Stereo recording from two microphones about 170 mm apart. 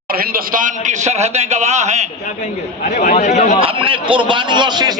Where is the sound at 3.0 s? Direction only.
45° left (ahead or behind).